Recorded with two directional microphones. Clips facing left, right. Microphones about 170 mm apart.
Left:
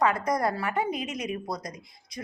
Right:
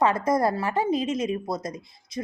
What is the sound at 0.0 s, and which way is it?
A woman's voice, 25° right (ahead or behind).